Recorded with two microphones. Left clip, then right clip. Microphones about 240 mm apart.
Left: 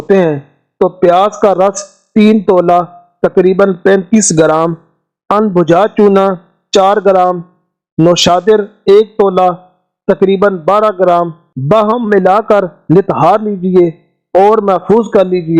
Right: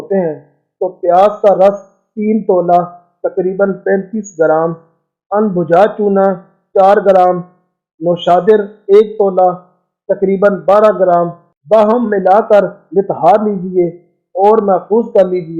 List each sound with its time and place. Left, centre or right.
0.1 s a man's voice: left